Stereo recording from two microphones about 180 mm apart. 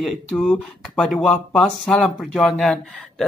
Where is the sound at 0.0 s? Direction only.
Centre (ahead or behind).